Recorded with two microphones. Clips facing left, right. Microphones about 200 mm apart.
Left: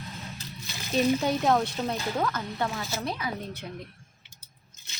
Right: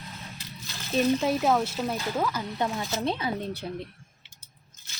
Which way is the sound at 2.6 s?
20° right (ahead or behind).